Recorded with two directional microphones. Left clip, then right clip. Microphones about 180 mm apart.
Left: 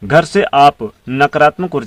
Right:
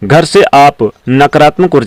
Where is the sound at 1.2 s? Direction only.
50° right (ahead or behind).